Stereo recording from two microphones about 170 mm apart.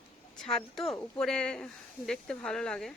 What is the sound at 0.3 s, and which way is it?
A woman's voice, centre (ahead or behind).